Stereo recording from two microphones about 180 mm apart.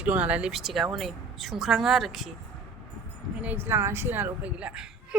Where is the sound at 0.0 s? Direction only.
5° right (ahead or behind).